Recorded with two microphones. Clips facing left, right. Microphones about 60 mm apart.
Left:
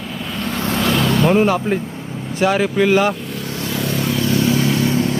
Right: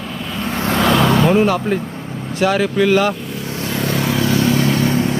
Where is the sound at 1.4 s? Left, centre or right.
Centre.